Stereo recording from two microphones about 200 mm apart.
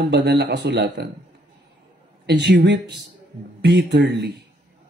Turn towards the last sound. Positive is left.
turn(degrees=-60)  # may be behind; listen again after turning